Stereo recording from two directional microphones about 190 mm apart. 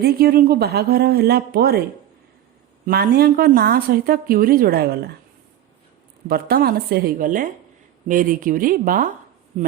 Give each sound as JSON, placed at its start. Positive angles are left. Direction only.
{"t": 0.0, "sound": "speech", "side_deg": -55}
{"t": 2.8, "sound": "a woman's voice", "side_deg": -55}
{"t": 6.2, "sound": "a woman's voice", "side_deg": -55}